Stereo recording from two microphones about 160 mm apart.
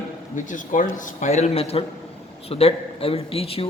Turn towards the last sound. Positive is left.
turn(degrees=35)  # may be behind; listen again after turning